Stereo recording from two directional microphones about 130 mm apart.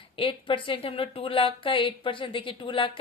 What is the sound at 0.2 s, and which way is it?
A woman's voice, 40° left (ahead or behind).